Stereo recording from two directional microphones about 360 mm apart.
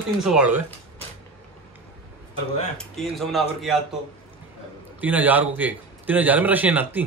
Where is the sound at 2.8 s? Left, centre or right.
Centre.